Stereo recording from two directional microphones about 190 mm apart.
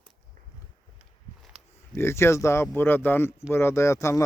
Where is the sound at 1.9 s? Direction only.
15° left (ahead or behind).